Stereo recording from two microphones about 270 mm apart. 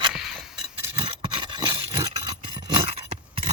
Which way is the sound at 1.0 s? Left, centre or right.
Centre.